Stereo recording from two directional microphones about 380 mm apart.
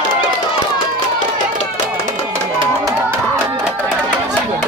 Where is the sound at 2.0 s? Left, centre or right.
Centre.